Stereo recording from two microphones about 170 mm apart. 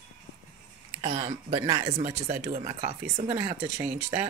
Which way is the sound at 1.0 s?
30° right (ahead or behind).